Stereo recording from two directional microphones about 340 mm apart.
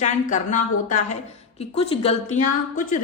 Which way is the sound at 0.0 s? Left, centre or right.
Left.